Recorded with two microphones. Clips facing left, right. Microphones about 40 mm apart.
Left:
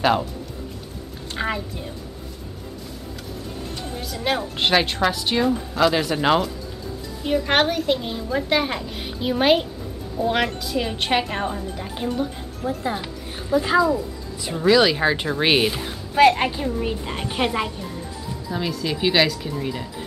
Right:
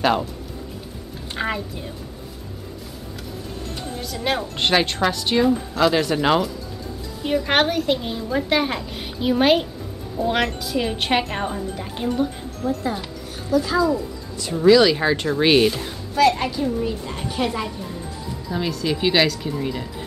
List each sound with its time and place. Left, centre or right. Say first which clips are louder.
1.3 s a woman's voice: right 1 dB; centre
4.0 s a woman's voice: even; centre
12.6 s speech: right 1 dB; centre
13.5 s a woman's voice: left 1 dB; left
13.8 s speech: even; centre
16.2 s speech: left 2 dB; left
18.5 s a woman's voice: right 2 dB; centre